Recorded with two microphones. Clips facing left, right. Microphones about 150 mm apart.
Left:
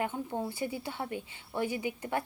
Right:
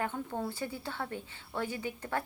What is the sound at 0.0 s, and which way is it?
A woman's voice, 15° left (ahead or behind).